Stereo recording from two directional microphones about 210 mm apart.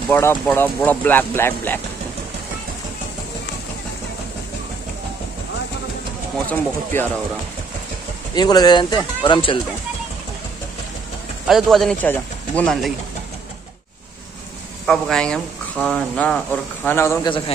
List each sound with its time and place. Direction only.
0.1 s speech: 10° left (ahead or behind)
6.4 s speech: 10° left (ahead or behind)
8.4 s speech: 20° left (ahead or behind)
11.4 s speech: centre (ahead or behind)
14.9 s speech: 5° left (ahead or behind)